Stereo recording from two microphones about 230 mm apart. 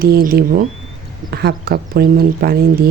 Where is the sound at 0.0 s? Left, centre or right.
Right.